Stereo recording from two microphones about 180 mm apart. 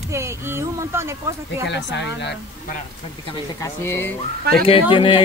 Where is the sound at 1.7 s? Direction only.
85° left.